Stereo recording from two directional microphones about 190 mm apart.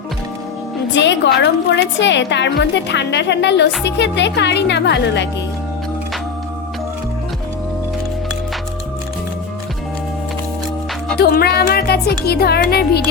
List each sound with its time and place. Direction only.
0.9 s a woman's voice: 70° left (ahead or behind)
11.2 s speech: 55° left (ahead or behind)